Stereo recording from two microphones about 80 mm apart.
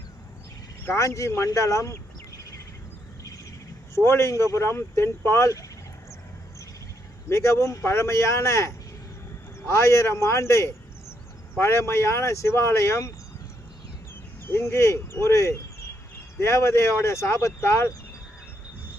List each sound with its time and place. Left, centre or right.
0.9 s speech: left
3.9 s speech: left
7.3 s speech: left
14.4 s speech: left